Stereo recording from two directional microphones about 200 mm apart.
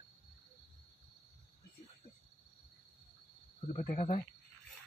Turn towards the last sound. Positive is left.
turn(degrees=35)  # may be behind; listen again after turning